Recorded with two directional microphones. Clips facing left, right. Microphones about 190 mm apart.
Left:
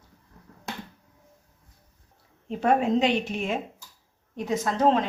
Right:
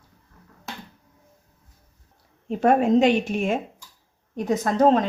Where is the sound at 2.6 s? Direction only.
45° right (ahead or behind).